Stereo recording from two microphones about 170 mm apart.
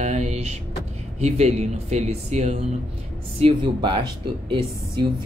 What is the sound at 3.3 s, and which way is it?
Speech, 30° right (ahead or behind).